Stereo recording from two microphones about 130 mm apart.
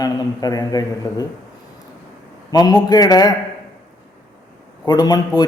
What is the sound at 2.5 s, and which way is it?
Speech, 30° left (ahead or behind).